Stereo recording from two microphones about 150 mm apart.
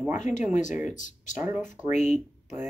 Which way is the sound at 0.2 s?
55° left (ahead or behind).